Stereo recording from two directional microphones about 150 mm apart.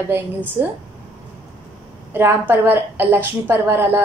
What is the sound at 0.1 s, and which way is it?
Speech, 15° right (ahead or behind).